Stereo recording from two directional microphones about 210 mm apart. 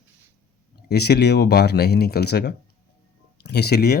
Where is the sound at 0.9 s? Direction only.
50° left (ahead or behind).